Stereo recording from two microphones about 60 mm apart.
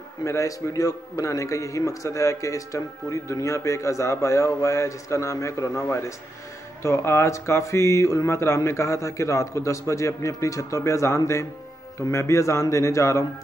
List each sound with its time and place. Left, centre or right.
0.2 s a man's voice: left